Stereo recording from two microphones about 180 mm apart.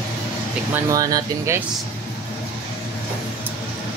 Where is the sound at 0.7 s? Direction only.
20° right (ahead or behind).